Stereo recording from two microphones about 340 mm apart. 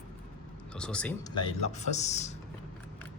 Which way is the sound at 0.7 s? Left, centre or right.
Centre.